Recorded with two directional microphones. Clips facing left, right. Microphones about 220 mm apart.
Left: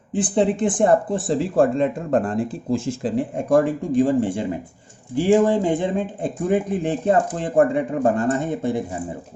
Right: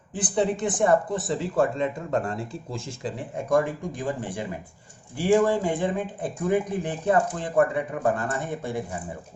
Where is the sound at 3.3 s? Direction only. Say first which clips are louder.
Left 4 dB; 30° left (ahead or behind).